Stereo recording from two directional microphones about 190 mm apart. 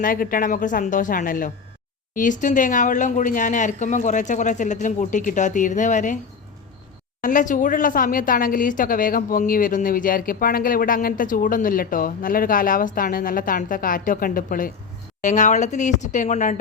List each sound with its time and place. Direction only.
0.0 s speech: 45° left (ahead or behind)
7.2 s speech: 45° left (ahead or behind)